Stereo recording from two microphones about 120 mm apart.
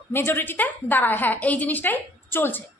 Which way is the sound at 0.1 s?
20° left (ahead or behind).